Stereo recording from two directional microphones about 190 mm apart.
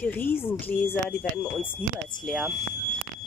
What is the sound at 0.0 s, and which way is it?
Speech, 10° left (ahead or behind).